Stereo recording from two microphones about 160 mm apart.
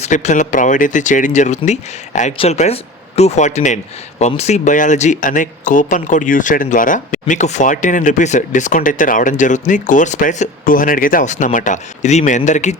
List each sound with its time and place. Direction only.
0.0 s speech: 45° left (ahead or behind)